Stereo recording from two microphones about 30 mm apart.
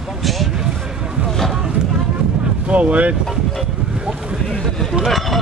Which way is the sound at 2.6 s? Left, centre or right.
Right.